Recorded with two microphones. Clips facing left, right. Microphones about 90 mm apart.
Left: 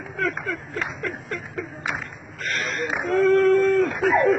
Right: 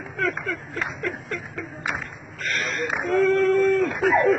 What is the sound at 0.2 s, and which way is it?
A man's voice, centre (ahead or behind).